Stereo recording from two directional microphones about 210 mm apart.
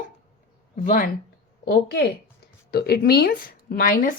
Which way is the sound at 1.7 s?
50° left (ahead or behind).